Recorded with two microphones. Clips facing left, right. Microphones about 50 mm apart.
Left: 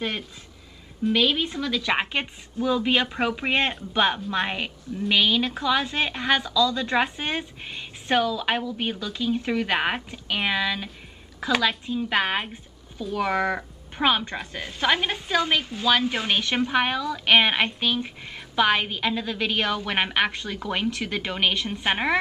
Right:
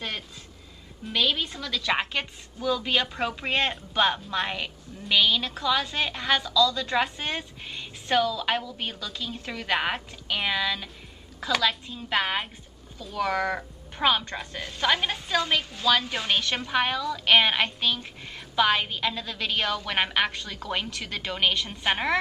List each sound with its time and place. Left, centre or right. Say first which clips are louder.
1.1 s a woman's voice: left 2 dB; centre